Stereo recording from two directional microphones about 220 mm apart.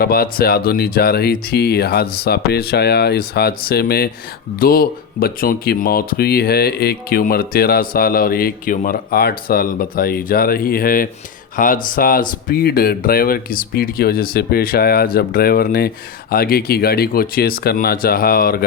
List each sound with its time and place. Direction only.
0.0 s speech: 45° left (ahead or behind)